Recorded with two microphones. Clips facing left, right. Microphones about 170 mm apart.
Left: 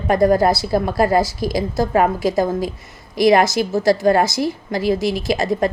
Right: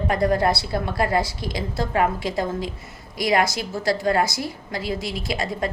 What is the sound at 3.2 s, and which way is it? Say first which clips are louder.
A woman's voice: left 8 dB; 25° left (ahead or behind).